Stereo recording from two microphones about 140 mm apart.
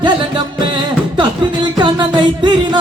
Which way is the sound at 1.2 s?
30° right (ahead or behind).